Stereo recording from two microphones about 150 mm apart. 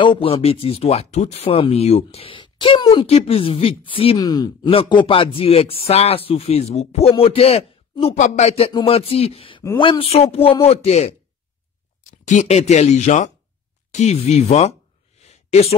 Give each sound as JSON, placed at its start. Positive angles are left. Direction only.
{"t": 0.0, "sound": "speech", "side_deg": 35}
{"t": 4.2, "sound": "speech", "side_deg": 25}
{"t": 4.6, "sound": "speech", "side_deg": 40}
{"t": 13.9, "sound": "a sound", "side_deg": 50}